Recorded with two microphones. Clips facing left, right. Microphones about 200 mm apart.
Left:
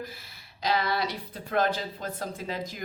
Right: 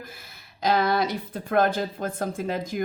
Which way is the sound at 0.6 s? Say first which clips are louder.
Right 5 dB; 50° right (ahead or behind).